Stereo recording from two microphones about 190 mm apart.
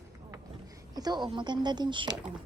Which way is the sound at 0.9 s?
20° right (ahead or behind).